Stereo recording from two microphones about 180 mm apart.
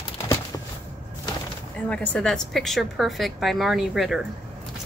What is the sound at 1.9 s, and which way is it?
A woman's voice, 5° left (ahead or behind).